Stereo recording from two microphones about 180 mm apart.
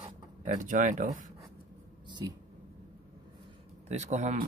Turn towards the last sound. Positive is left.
turn(degrees=-40)  # may be behind; listen again after turning